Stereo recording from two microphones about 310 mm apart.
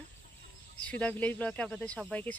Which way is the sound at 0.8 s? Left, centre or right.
Centre.